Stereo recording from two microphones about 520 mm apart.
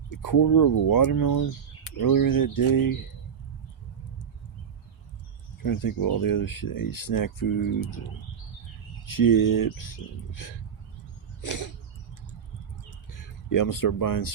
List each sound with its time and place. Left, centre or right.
0.2 s speech: left
5.6 s speech: left
9.0 s speech: left
13.1 s speech: left